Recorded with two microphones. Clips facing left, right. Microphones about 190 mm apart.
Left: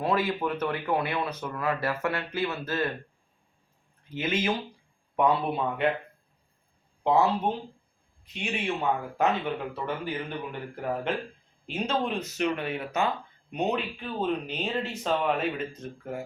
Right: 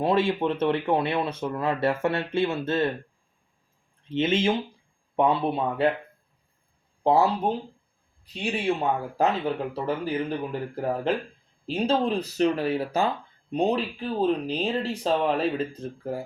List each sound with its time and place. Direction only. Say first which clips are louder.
0.0 s speech: right 4 dB; 25° right (ahead or behind)
4.1 s speech: right 5 dB; 25° right (ahead or behind)
8.2 s speech: right 4 dB; 35° right (ahead or behind)